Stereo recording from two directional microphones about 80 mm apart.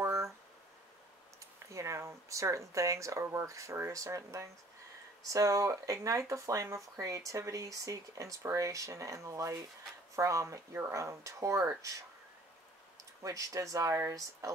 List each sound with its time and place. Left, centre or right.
0.0 s a sound: right
1.7 s speech: right
13.2 s speech: right